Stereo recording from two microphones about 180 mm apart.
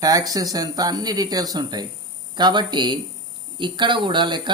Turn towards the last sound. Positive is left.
turn(degrees=-25)  # may be behind; listen again after turning